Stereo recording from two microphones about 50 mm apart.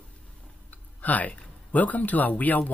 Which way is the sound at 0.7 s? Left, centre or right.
Left.